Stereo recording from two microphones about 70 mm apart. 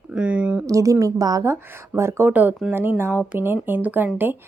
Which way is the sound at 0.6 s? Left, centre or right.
Right.